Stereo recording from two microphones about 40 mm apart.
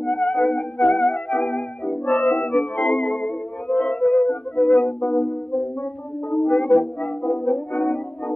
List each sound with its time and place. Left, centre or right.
0.0 s music: left